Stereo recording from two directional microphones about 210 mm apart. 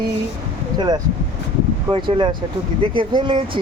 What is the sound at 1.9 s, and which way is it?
Speech, 20° right (ahead or behind).